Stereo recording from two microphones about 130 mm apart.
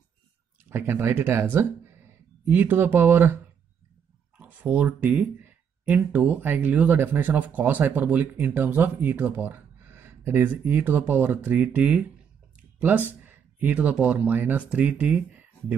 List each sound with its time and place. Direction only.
0.7 s speech: 15° right (ahead or behind)
4.4 s speech: 10° right (ahead or behind)
13.2 s speech: 15° right (ahead or behind)